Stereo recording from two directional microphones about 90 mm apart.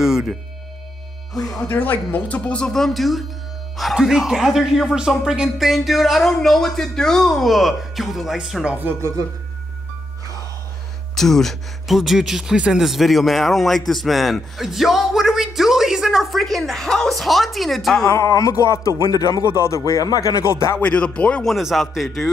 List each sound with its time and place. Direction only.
0.0 s music: 5° right (ahead or behind)
1.4 s speech: centre (ahead or behind)
1.7 s speech: 20° left (ahead or behind); by 8.7 s 5° right (ahead or behind)
8.7 s speech: 25° right (ahead or behind)
11.1 s speech: 5° left (ahead or behind)
18.0 s a man's voice: 35° left (ahead or behind)
20.7 s speech: 15° left (ahead or behind)
21.5 s speech: centre (ahead or behind)